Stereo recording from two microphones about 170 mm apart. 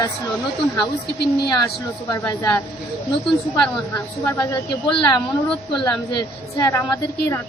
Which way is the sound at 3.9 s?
15° left (ahead or behind).